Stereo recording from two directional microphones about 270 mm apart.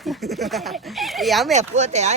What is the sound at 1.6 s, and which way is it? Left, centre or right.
Speech, right.